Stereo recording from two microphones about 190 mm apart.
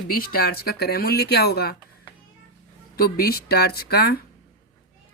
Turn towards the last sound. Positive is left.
turn(degrees=55)  # may be behind; listen again after turning